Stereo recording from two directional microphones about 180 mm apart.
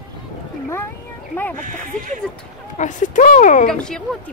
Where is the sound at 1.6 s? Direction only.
45° right (ahead or behind).